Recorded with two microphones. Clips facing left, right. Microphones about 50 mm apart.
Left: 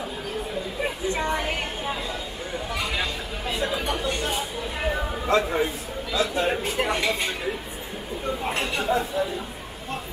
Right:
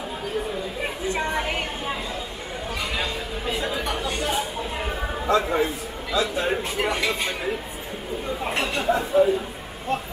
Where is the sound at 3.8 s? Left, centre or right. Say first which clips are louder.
Even; right.